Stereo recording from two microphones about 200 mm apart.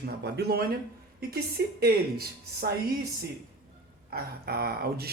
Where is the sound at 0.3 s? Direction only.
55° right (ahead or behind).